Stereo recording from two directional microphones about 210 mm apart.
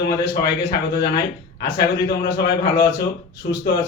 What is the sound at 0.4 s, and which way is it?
Speech, 50° left (ahead or behind).